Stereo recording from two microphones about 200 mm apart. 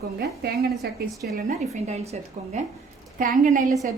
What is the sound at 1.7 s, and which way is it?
Speech, 35° right (ahead or behind).